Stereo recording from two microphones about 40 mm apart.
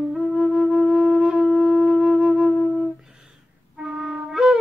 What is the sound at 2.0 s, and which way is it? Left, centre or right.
Flute, centre.